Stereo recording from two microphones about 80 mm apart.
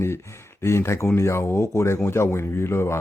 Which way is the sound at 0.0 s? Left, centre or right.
Left.